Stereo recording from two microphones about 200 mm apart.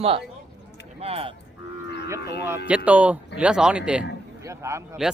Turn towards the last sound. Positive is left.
turn(degrees=-15)  # may be behind; listen again after turning